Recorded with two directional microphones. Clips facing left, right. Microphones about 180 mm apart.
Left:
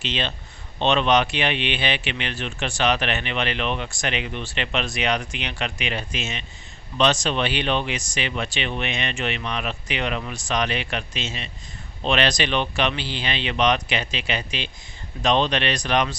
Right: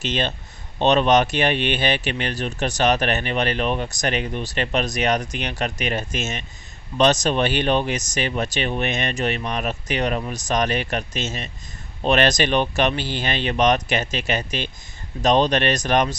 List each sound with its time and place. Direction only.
0.0 s speech: 45° right (ahead or behind)